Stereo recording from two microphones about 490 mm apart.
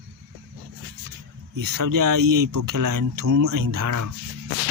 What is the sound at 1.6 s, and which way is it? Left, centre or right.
Speech, right.